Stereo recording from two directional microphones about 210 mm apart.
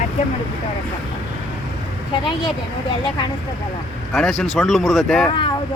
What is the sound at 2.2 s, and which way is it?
Speech, 20° left (ahead or behind).